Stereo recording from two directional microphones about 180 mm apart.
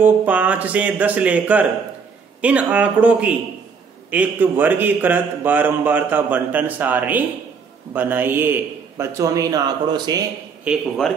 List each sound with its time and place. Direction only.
0.0 s speech: 10° right (ahead or behind)
10.6 s speech: centre (ahead or behind)